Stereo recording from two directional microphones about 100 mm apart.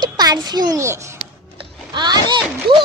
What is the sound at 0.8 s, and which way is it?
Speech, 30° right (ahead or behind).